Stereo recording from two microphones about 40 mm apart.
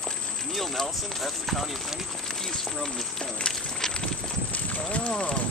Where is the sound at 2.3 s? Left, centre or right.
Centre.